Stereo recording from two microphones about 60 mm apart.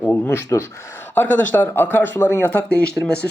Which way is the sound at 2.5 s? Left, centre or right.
Left.